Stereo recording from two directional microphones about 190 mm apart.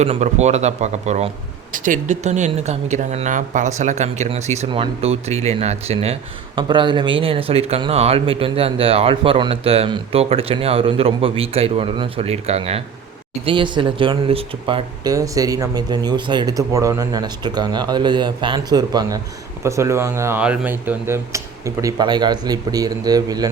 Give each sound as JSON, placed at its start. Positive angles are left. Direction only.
{"t": 0.0, "sound": "speech", "side_deg": -35}